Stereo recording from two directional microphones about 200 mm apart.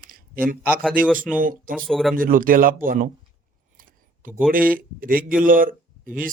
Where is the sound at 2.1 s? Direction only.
45° right (ahead or behind).